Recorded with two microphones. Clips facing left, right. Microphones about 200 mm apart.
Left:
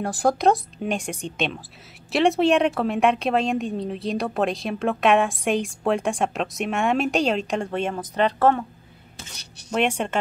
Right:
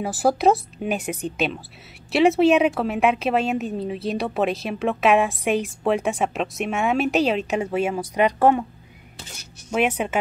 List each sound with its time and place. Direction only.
0.0 s speech: 5° right (ahead or behind)
9.7 s speech: 5° right (ahead or behind)